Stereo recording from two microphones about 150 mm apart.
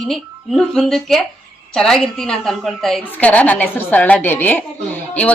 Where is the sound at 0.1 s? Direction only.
Centre (ahead or behind).